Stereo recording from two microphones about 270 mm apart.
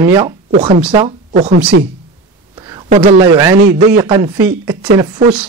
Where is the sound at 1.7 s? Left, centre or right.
Right.